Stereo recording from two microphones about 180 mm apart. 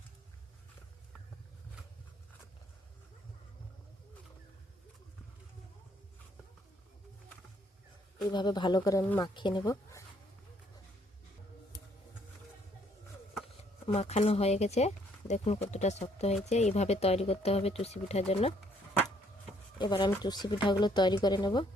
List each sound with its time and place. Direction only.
8.3 s speech: 25° left (ahead or behind)
9.2 s speech: 25° left (ahead or behind)
13.8 s speech: 35° left (ahead or behind)
19.8 s speech: 25° left (ahead or behind)